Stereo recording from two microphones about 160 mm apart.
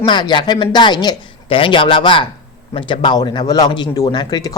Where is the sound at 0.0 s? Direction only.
30° left (ahead or behind).